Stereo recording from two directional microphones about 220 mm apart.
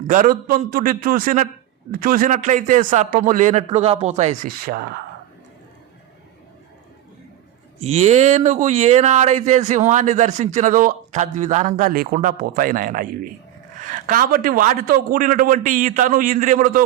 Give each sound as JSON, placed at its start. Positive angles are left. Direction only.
{"t": 0.1, "sound": "speech", "side_deg": -40}
{"t": 7.8, "sound": "speech", "side_deg": -30}